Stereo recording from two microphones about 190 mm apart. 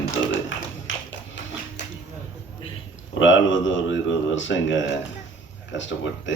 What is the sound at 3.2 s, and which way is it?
Speech, 80° left.